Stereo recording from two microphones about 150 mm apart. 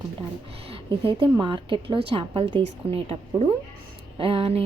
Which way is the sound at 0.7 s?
35° right (ahead or behind).